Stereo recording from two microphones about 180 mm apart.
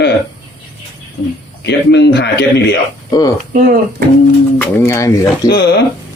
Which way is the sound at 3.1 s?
20° left (ahead or behind).